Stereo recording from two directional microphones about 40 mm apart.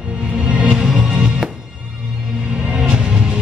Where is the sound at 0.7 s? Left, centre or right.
Centre.